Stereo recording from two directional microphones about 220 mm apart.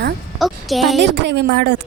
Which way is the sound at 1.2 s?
50° right (ahead or behind).